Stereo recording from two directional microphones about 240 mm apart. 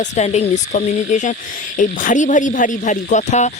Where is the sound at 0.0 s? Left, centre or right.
Left.